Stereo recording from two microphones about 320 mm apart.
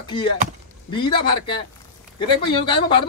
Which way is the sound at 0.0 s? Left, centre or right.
Centre.